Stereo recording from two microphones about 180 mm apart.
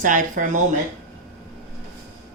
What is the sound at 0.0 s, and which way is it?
Speech, 45° right (ahead or behind).